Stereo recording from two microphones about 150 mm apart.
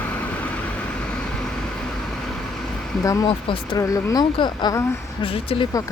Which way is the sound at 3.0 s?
20° left (ahead or behind).